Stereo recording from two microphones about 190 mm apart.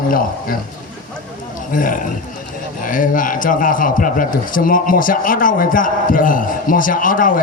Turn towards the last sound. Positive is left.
turn(degrees=45)  # may be behind; listen again after turning